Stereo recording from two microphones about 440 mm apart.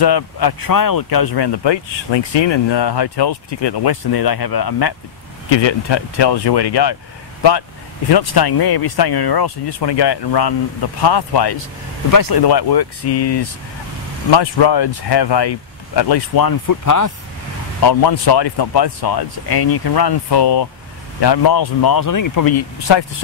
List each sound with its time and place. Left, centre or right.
0.0 s speech: left
5.5 s speech: left
8.1 s speech: left
12.1 s speech: left
13.1 s speech: left
14.3 s speech: left
17.8 s speech: left
22.8 s speech: left